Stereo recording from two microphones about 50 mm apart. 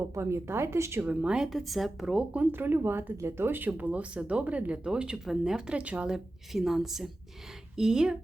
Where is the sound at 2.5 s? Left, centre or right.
Right.